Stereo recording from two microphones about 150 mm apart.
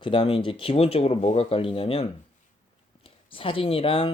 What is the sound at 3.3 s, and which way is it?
Speech, 35° left (ahead or behind).